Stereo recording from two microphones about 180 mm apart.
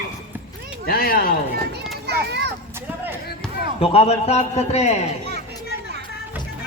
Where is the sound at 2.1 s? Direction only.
65° right (ahead or behind).